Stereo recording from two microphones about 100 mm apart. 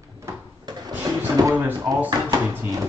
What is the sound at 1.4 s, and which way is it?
Speech, 40° right (ahead or behind).